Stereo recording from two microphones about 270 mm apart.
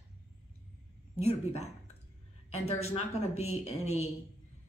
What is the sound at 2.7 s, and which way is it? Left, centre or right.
A woman's voice, left.